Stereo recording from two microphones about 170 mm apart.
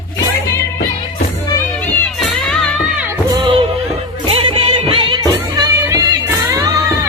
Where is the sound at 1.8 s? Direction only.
Centre (ahead or behind).